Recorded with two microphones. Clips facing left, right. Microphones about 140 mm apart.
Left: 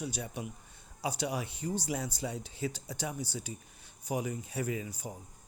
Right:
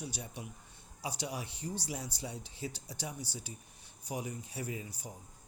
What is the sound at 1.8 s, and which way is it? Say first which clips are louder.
Speech: left 6 dB; 90° left.